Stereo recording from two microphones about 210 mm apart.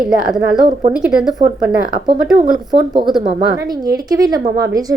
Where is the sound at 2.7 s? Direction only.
20° right (ahead or behind).